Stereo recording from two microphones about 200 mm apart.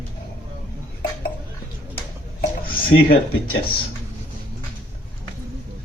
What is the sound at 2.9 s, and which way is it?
Speech, 75° left (ahead or behind).